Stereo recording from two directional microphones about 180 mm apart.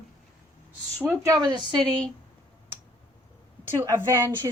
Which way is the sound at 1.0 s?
15° right (ahead or behind).